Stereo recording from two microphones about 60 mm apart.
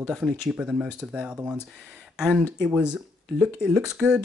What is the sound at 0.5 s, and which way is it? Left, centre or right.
Speech, centre.